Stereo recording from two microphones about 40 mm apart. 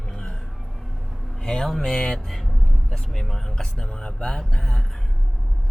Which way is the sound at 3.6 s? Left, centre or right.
Centre.